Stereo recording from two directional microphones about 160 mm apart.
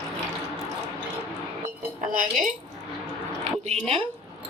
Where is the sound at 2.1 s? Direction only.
55° right (ahead or behind).